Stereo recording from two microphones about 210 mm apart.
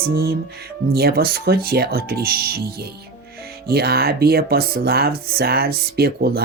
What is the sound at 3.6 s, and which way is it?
Speech, 45° right (ahead or behind).